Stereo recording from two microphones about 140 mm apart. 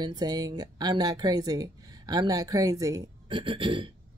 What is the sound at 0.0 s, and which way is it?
Speech, 30° right (ahead or behind).